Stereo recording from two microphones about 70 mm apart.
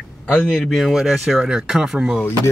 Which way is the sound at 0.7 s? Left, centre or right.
Centre.